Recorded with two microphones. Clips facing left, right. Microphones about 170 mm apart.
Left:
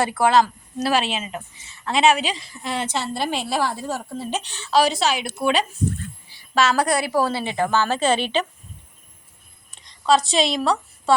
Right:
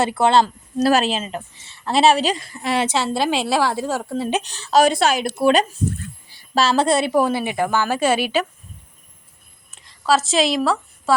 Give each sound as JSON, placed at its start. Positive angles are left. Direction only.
{"t": 0.0, "sound": "a woman's voice", "side_deg": -25}
{"t": 0.9, "sound": "a woman's voice", "side_deg": -40}
{"t": 2.3, "sound": "a woman's voice", "side_deg": -60}
{"t": 4.4, "sound": "a woman's voice", "side_deg": -40}
{"t": 6.5, "sound": "a woman's voice", "side_deg": -30}
{"t": 9.7, "sound": "a woman's voice", "side_deg": -5}